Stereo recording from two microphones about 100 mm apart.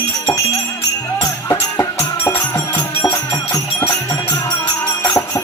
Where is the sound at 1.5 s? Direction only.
30° left (ahead or behind).